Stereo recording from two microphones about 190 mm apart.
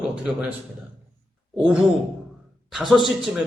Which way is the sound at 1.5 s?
5° right (ahead or behind).